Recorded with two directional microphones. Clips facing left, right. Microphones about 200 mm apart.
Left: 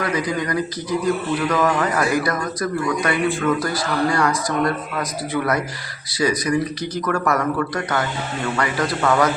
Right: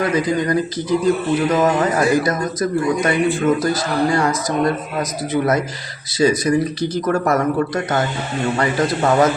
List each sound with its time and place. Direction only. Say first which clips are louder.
0.0 s speech: right 4 dB; 25° right (ahead or behind)